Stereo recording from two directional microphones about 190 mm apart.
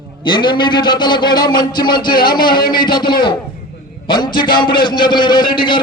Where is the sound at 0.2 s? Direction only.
25° left (ahead or behind).